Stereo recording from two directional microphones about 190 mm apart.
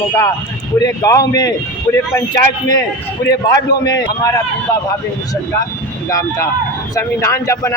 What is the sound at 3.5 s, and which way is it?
Speech, 20° left (ahead or behind).